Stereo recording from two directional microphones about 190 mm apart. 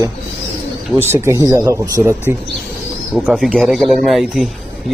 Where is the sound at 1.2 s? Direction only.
15° right (ahead or behind).